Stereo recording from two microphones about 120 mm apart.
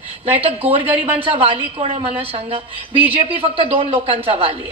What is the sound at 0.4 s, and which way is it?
A woman's voice, 55° right (ahead or behind).